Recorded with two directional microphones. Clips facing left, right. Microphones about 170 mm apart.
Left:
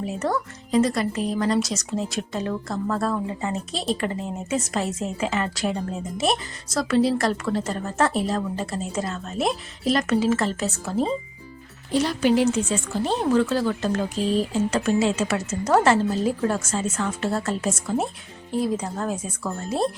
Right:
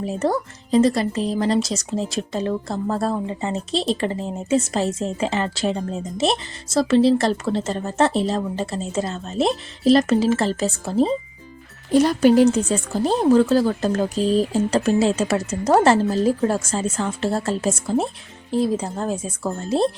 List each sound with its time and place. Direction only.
0.0 s speech: 30° right (ahead or behind)
11.9 s speech: 45° right (ahead or behind); by 19.9 s 25° right (ahead or behind)